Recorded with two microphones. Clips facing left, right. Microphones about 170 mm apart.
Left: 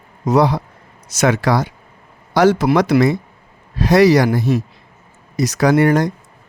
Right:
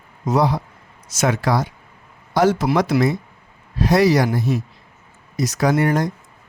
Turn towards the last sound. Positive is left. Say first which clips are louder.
# left 4 dB
turn(degrees=80)